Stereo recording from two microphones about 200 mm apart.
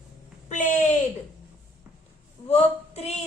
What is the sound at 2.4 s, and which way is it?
Speech, 30° left (ahead or behind).